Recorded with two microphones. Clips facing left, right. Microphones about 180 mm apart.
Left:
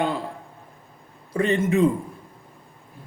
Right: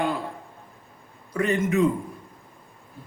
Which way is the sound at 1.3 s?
30° left (ahead or behind).